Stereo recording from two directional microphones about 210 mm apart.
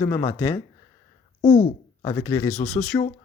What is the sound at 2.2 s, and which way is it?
Speech, 10° left (ahead or behind).